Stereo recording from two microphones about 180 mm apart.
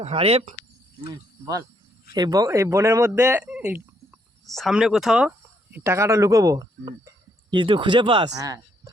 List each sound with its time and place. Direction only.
0.0 s speech: 35° right (ahead or behind)
2.1 s speech: 20° right (ahead or behind); by 5.3 s 5° right (ahead or behind)
5.7 s speech: 15° right (ahead or behind)